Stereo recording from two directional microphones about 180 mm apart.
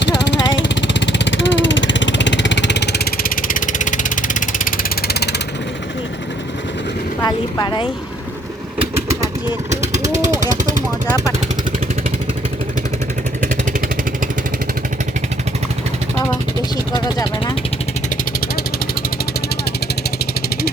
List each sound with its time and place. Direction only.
0.5 s vehicle: 85° left; by 5.3 s 55° left (ahead or behind)
7.2 s vehicle: 20° left (ahead or behind)
9.9 s a sound: 40° right (ahead or behind)
16.9 s vehicle: 25° left (ahead or behind)